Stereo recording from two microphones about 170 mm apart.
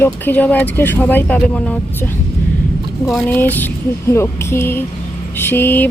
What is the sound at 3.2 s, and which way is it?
Speech, 10° left (ahead or behind).